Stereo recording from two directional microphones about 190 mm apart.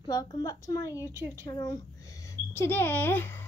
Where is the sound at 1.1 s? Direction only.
20° left (ahead or behind).